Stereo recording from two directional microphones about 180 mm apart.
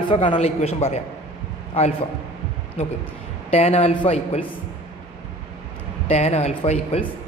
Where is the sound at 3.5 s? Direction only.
35° left (ahead or behind).